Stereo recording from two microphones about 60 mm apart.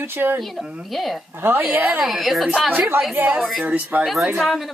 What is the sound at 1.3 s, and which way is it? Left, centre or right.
Speech, right.